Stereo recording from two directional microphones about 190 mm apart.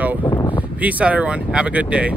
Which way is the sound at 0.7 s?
5° right (ahead or behind).